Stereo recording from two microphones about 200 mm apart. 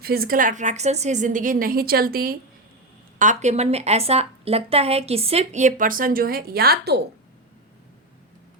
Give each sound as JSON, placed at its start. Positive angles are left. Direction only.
{"t": 0.0, "sound": "a woman's voice", "side_deg": -50}
{"t": 3.2, "sound": "a woman's voice", "side_deg": -35}